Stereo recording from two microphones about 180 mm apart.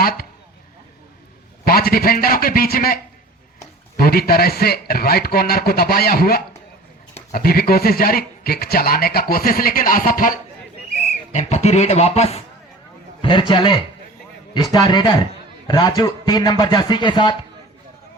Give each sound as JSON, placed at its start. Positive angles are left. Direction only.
{"t": 0.0, "sound": "speech", "side_deg": 55}
{"t": 1.6, "sound": "speech", "side_deg": 55}
{"t": 13.5, "sound": "a man's voice", "side_deg": 25}